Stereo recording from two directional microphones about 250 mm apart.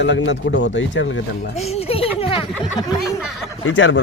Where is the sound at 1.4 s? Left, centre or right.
Left.